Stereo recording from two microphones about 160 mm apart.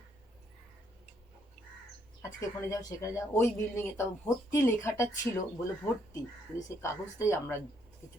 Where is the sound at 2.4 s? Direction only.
20° left (ahead or behind).